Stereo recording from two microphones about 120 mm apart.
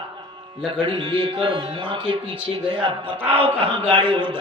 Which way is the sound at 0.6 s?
40° right (ahead or behind).